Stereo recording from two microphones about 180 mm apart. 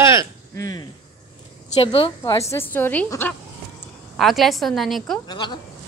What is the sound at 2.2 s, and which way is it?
A woman's voice, 20° left (ahead or behind).